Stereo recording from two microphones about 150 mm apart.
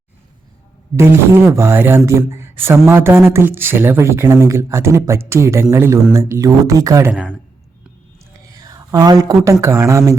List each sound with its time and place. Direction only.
1.5 s speech: 15° right (ahead or behind)
8.4 s speech: 25° right (ahead or behind)